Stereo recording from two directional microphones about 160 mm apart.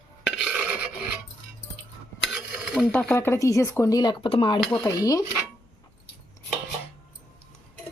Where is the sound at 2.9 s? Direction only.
10° left (ahead or behind).